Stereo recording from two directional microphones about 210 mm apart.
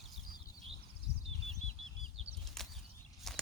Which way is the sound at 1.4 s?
Centre (ahead or behind).